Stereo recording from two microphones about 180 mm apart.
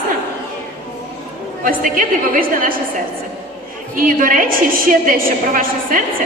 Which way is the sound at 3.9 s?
50° right (ahead or behind).